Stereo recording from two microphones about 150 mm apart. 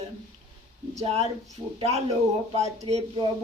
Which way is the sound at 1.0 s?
45° right (ahead or behind).